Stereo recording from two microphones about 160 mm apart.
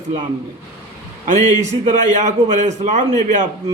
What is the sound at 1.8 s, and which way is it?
A man's voice, 45° right (ahead or behind).